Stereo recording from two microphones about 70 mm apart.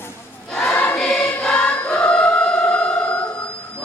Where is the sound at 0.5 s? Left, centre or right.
Centre.